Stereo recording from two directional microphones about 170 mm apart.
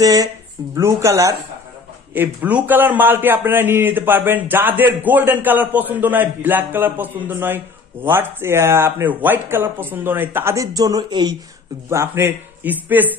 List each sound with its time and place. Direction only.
0.0 s a man's voice: 20° right (ahead or behind)
11.9 s a man's voice: 15° right (ahead or behind)